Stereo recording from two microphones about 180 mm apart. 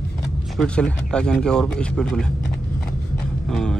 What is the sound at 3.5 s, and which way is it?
Speech, 5° left (ahead or behind).